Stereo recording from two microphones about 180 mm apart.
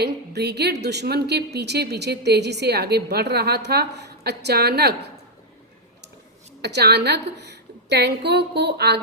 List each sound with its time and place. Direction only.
0.0 s a woman's voice: 65° right (ahead or behind)
6.6 s a woman's voice: 65° right (ahead or behind)